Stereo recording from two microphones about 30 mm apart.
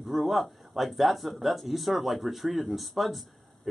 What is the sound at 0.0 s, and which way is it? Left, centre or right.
Speech, centre.